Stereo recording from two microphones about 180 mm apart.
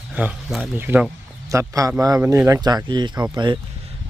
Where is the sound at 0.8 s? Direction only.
10° right (ahead or behind).